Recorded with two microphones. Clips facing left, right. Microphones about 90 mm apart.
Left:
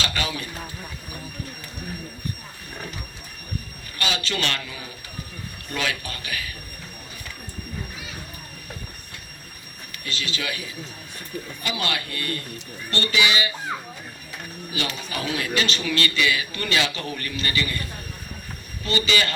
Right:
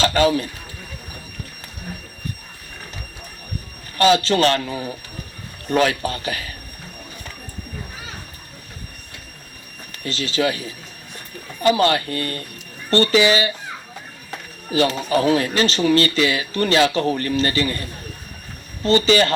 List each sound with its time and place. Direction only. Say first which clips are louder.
0.0 s a sound: right 11 dB; 35° right (ahead or behind)
3.9 s speech: right 12 dB; 40° right (ahead or behind)
10.0 s speech: right 10 dB; 35° right (ahead or behind)